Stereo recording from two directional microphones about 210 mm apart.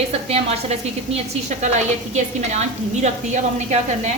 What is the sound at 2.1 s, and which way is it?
A woman's voice, 35° right (ahead or behind).